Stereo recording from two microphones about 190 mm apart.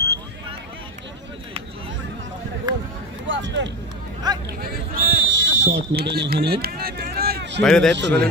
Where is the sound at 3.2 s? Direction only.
75° right (ahead or behind).